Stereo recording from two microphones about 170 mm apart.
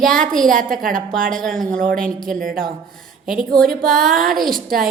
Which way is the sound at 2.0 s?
55° right (ahead or behind).